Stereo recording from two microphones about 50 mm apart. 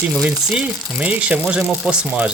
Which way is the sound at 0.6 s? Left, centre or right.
Right.